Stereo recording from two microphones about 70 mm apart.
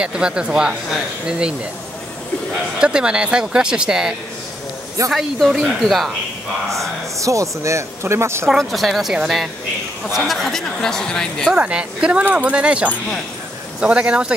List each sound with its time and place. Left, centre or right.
0.0 s speech: centre
2.8 s speech: centre
5.1 s speech: centre
7.2 s speech: right
8.5 s speech: centre
10.1 s speech: centre
11.5 s speech: centre